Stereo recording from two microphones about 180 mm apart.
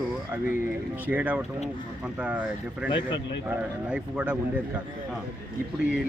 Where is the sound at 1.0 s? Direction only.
10° right (ahead or behind).